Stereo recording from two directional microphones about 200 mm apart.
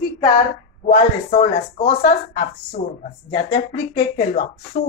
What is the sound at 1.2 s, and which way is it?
Speech, 40° left (ahead or behind).